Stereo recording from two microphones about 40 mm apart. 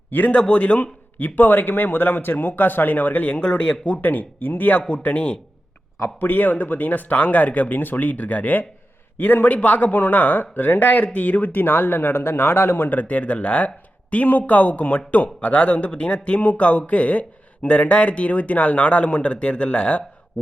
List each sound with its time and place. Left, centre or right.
0.3 s a man's voice: left
0.8 s speech: left
4.0 s speech: left
4.9 s a man's voice: left
6.1 s speech: left
7.8 s speech: left
8.0 s a man's voice: left
9.1 s speech: left
9.5 s speech: left
12.7 s a man's voice: left